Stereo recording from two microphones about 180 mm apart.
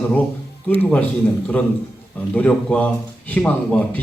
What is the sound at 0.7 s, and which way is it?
Speech, 10° left (ahead or behind).